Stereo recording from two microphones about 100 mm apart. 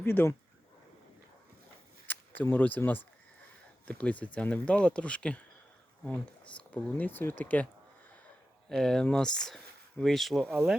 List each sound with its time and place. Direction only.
0.0 s speech: 20° left (ahead or behind)
2.0 s speech: 20° left (ahead or behind)
8.7 s speech: 5° left (ahead or behind)
10.4 s speech: 15° right (ahead or behind)